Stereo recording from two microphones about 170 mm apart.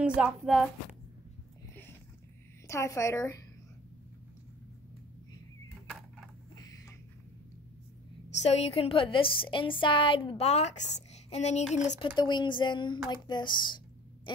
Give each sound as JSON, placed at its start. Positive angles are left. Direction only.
{"t": 0.0, "sound": "speech", "side_deg": -5}
{"t": 2.7, "sound": "a woman's voice", "side_deg": 15}
{"t": 8.4, "sound": "a woman's voice", "side_deg": 40}
{"t": 12.2, "sound": "speech", "side_deg": 25}